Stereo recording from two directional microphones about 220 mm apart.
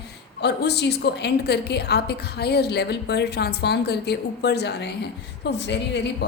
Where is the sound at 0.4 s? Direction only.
50° left (ahead or behind).